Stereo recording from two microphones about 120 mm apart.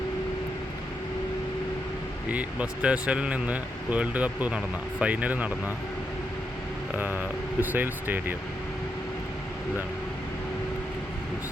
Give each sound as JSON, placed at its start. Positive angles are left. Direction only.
{"t": 2.3, "sound": "speech", "side_deg": -10}
{"t": 7.6, "sound": "speech", "side_deg": -15}